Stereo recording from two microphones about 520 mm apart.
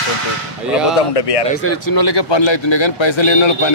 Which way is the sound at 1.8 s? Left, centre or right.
Left.